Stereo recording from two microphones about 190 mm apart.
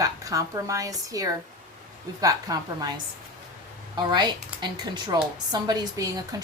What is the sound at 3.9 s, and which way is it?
Speech, 25° right (ahead or behind).